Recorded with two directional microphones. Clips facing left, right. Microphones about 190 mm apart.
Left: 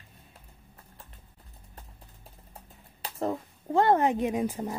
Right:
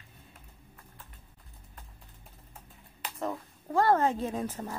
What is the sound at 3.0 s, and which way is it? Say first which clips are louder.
Speech: left 4 dB; 30° left (ahead or behind).